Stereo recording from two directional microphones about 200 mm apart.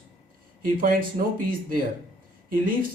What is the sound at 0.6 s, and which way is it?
Speech, 45° right (ahead or behind).